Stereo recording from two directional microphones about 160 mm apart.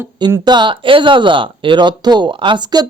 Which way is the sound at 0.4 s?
30° right (ahead or behind).